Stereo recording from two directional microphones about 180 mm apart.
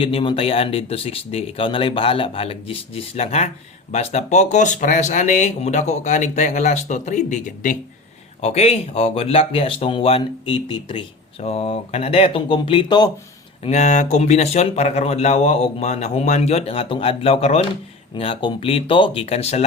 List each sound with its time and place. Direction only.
0.0 s speech: 30° left (ahead or behind); by 7.8 s 45° left (ahead or behind)
8.4 s speech: 35° left (ahead or behind)
13.7 s speech: 40° left (ahead or behind)